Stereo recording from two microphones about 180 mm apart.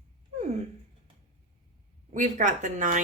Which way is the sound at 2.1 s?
45° right (ahead or behind).